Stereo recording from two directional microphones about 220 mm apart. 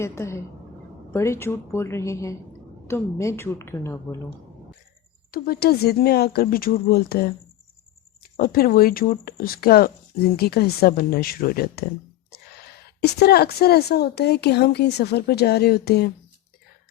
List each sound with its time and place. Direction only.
0.0 s a woman's voice: 10° left (ahead or behind)
5.3 s a woman's voice: 45° left (ahead or behind)
8.4 s a woman's voice: 40° left (ahead or behind)